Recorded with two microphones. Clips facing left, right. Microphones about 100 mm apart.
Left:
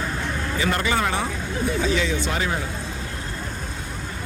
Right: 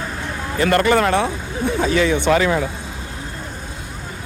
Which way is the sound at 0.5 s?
60° right (ahead or behind).